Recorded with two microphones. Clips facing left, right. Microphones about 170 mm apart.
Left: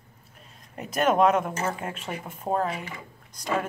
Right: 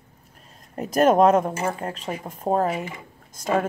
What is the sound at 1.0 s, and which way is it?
Speech, 40° right (ahead or behind).